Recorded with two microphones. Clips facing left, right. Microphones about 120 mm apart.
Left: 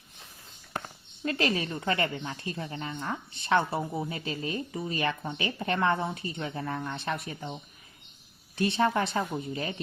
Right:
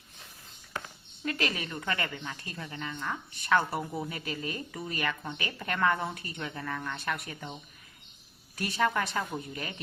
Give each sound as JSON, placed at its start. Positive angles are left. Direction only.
{"t": 1.2, "sound": "speech", "side_deg": 30}
{"t": 8.5, "sound": "speech", "side_deg": 25}